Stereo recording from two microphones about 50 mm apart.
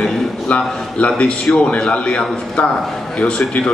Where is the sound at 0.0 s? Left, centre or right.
Left.